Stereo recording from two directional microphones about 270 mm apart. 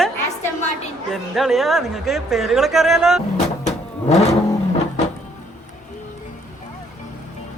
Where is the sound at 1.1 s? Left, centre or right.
Centre.